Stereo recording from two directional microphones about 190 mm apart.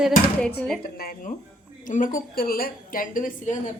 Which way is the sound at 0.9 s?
50° left (ahead or behind).